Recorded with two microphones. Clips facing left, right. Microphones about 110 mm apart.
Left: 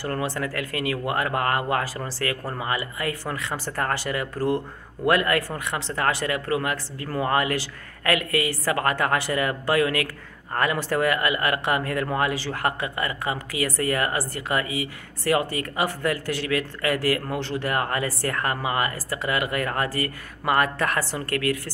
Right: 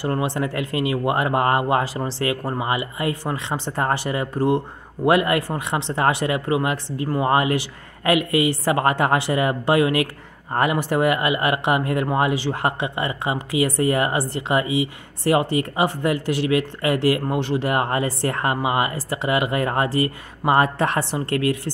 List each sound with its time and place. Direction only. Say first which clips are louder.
0.0 s speech: right 4 dB; 20° right (ahead or behind)